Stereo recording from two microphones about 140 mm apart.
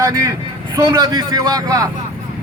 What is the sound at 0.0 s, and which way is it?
Speech, 25° right (ahead or behind).